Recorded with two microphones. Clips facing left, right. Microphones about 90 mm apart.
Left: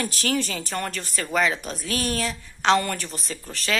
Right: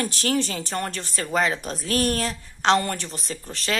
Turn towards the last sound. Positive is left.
turn(degrees=-30)  # may be behind; listen again after turning